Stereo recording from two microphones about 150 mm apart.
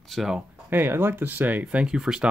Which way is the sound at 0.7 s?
15° right (ahead or behind).